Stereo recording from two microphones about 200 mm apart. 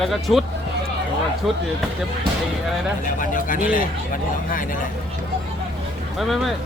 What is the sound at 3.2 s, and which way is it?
Speech, 40° left (ahead or behind).